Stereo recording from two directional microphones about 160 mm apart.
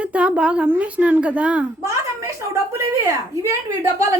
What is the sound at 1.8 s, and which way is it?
A woman's voice, 20° right (ahead or behind).